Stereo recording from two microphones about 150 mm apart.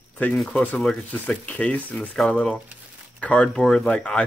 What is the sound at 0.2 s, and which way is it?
Speech, 5° left (ahead or behind).